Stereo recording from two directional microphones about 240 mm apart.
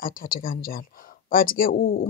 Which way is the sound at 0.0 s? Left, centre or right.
Left.